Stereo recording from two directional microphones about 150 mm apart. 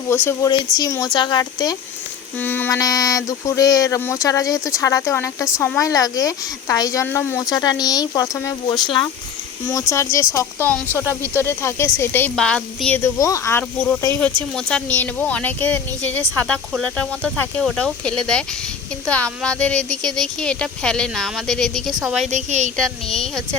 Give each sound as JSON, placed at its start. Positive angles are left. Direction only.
{"t": 0.1, "sound": "speech", "side_deg": 15}
{"t": 2.4, "sound": "speech", "side_deg": 15}
{"t": 11.0, "sound": "speech", "side_deg": -15}
{"t": 11.3, "sound": "speech", "side_deg": 15}
{"t": 13.1, "sound": "speech", "side_deg": 20}
{"t": 22.3, "sound": "speech", "side_deg": -50}
{"t": 22.8, "sound": "speech", "side_deg": 0}